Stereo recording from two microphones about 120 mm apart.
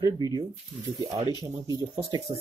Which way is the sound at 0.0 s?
35° right (ahead or behind).